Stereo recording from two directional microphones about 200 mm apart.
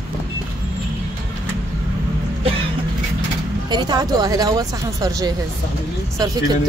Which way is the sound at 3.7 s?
20° right (ahead or behind).